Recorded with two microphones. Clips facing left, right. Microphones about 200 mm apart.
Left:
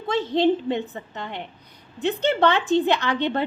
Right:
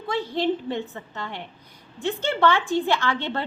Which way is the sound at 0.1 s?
20° left (ahead or behind).